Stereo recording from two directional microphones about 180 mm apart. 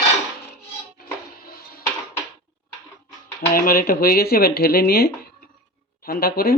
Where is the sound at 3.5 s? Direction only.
55° left (ahead or behind).